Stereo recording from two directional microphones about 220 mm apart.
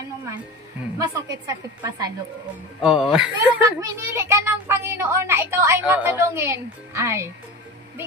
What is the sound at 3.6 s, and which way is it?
A woman's voice, 15° right (ahead or behind).